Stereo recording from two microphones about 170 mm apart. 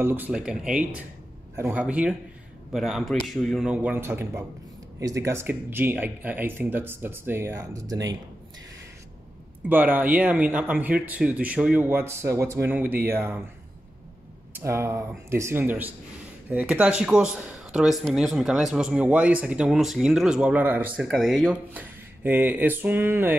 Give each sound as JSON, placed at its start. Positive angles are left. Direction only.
{"t": 0.0, "sound": "speech", "side_deg": -10}
{"t": 9.7, "sound": "speech", "side_deg": -10}
{"t": 14.5, "sound": "speech", "side_deg": -15}